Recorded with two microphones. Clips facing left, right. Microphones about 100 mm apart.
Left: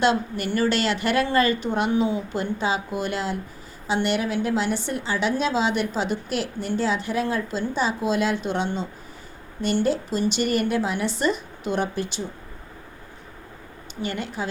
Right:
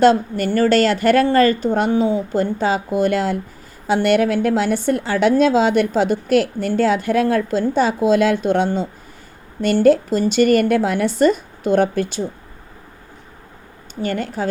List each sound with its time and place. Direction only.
0.0 s a woman's voice: 40° right (ahead or behind)
14.0 s a woman's voice: 45° right (ahead or behind)